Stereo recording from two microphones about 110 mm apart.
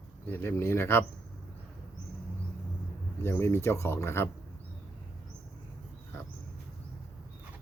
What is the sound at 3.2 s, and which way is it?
Speech, 25° left (ahead or behind).